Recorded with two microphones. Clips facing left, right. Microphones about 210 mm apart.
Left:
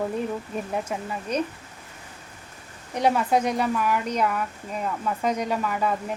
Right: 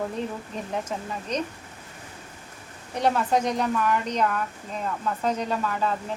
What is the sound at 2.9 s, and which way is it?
A woman's voice, 10° left (ahead or behind).